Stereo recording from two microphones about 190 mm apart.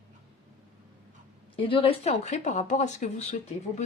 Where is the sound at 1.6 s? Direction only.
30° left (ahead or behind).